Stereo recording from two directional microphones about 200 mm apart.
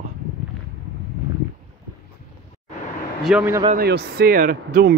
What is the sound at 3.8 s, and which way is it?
Speech, 55° right (ahead or behind).